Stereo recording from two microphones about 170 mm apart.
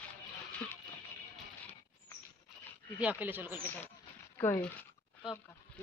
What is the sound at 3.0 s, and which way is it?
Speech, 10° right (ahead or behind).